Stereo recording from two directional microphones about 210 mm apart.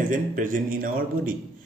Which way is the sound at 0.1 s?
40° right (ahead or behind).